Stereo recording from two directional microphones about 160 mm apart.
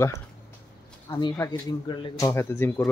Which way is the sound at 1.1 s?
25° left (ahead or behind).